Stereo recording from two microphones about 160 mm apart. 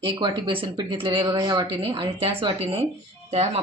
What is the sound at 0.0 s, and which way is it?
Speech, 35° right (ahead or behind).